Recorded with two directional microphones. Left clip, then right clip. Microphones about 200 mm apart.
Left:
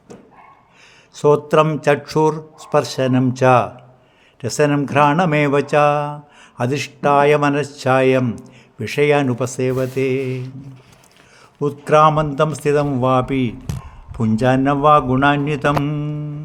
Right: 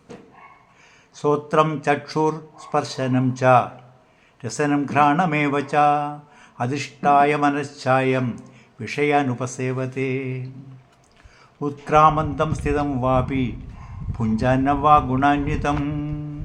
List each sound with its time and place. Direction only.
1.1 s a man's voice: 50° left (ahead or behind)
11.6 s a man's voice: 50° left (ahead or behind)